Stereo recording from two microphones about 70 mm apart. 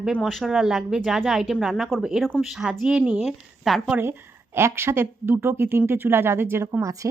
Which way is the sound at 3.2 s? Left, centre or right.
Centre.